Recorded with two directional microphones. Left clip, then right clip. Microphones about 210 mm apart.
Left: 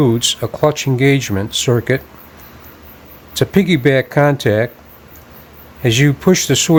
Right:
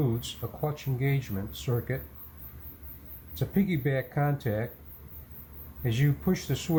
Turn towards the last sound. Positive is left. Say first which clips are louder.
# left 18 dB
turn(degrees=55)  # may be behind; listen again after turning